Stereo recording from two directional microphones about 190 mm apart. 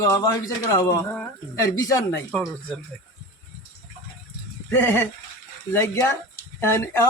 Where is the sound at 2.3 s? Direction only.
5° left (ahead or behind).